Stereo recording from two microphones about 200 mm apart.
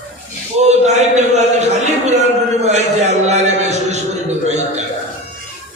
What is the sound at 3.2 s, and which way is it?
Music, 35° right (ahead or behind).